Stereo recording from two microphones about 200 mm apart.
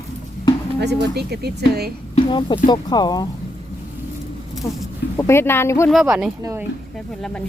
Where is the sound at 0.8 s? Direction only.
55° right (ahead or behind).